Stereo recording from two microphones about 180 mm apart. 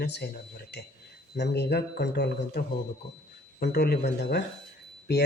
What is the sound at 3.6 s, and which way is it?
Speech, 65° left (ahead or behind).